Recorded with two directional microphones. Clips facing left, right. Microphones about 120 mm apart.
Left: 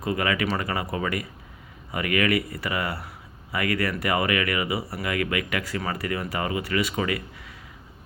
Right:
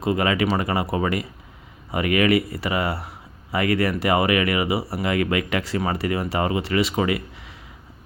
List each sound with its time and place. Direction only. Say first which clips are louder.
0.0 s speech: right 4 dB; 25° right (ahead or behind)